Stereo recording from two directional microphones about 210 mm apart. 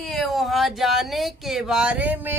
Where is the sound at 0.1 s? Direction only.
Centre (ahead or behind).